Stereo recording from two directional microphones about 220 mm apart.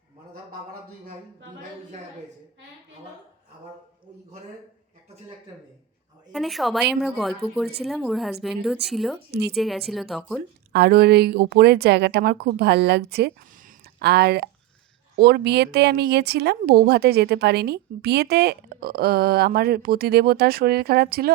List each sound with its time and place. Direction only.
6.3 s speech: centre (ahead or behind)
9.3 s speech: 45° right (ahead or behind)
9.6 s speech: centre (ahead or behind)
10.7 s speech: 45° right (ahead or behind)